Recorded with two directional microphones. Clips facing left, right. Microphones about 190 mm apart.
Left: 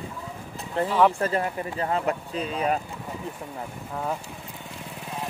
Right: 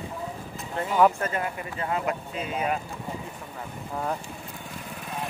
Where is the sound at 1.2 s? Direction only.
35° left (ahead or behind).